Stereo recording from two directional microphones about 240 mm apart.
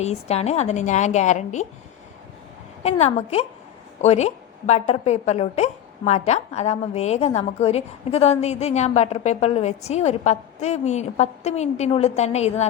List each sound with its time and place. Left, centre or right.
0.0 s a woman's voice: left
2.8 s a woman's voice: left